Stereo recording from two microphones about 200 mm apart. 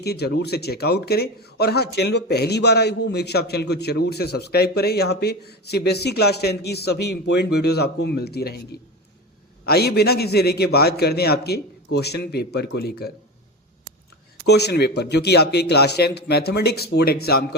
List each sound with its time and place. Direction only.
0.0 s speech: 55° left (ahead or behind)
9.6 s speech: 55° left (ahead or behind)
14.4 s a man's voice: 55° left (ahead or behind)